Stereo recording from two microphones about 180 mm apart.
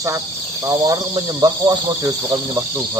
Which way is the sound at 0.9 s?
25° right (ahead or behind).